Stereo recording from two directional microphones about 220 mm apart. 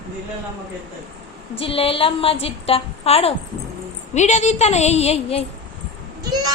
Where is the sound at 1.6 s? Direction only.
25° left (ahead or behind).